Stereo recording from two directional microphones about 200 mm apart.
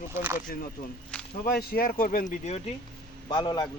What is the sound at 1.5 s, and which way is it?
Speech, 50° left (ahead or behind).